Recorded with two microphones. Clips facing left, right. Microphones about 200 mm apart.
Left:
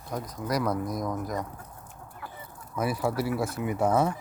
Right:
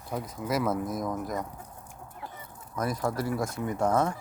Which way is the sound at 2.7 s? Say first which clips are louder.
Left 2 dB; 10° left (ahead or behind).